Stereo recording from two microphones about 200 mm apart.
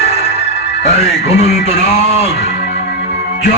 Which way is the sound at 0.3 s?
55° left (ahead or behind).